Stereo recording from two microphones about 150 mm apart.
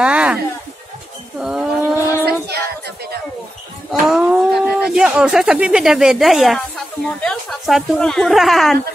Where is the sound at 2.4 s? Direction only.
90° right.